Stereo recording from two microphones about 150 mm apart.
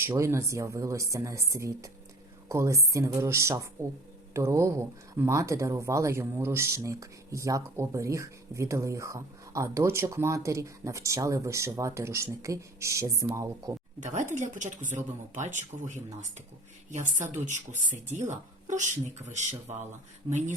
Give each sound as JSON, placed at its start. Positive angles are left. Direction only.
{"t": 0.0, "sound": "speech", "side_deg": -15}
{"t": 14.0, "sound": "speech", "side_deg": -55}